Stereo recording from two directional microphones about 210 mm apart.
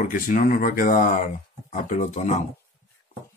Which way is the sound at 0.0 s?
40° left (ahead or behind).